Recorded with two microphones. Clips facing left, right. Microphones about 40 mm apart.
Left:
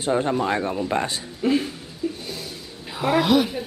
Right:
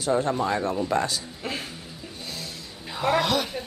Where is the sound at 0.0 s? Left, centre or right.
Left.